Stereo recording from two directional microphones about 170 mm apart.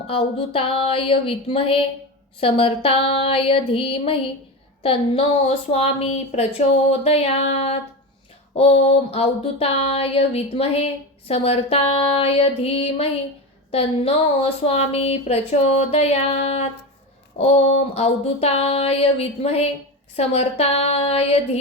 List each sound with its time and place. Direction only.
0.1 s a woman's voice: 35° left (ahead or behind)
8.8 s a woman's voice: 35° left (ahead or behind)